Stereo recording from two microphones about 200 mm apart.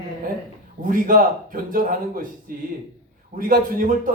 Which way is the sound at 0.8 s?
45° right (ahead or behind).